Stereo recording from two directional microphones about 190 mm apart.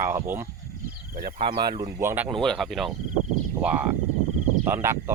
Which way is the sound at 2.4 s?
Centre (ahead or behind).